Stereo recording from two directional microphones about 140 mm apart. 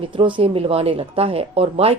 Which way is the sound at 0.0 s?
35° right (ahead or behind).